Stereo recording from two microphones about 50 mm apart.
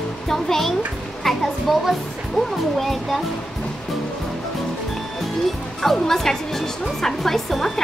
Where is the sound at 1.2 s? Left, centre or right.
Centre.